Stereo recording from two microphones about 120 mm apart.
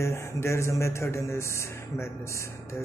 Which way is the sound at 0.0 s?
20° left (ahead or behind).